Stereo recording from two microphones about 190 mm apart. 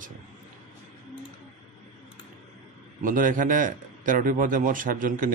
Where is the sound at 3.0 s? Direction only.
45° right (ahead or behind).